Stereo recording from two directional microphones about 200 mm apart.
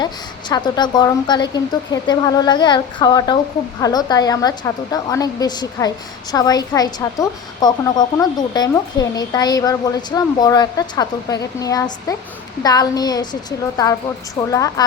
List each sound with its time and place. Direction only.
0.0 s a woman's voice: 20° left (ahead or behind)
14.5 s speech: 15° left (ahead or behind)